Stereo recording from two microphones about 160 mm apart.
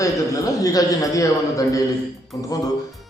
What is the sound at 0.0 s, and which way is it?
A man's voice, 20° left (ahead or behind).